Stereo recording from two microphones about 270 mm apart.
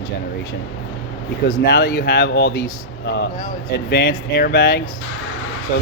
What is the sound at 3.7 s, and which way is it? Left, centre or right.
Speech, left.